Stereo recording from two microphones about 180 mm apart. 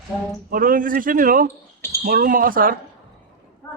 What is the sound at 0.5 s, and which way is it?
A man's voice, 50° right (ahead or behind).